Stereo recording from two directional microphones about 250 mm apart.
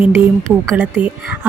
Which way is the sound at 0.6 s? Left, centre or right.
Centre.